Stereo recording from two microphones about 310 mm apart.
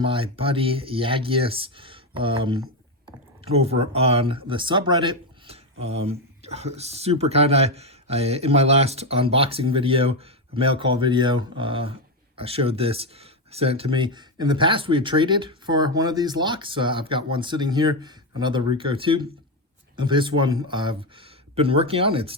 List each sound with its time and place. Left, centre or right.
0.0 s speech: centre